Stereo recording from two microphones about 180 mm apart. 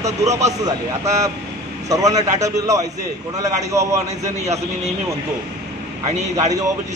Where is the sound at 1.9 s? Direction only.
20° right (ahead or behind).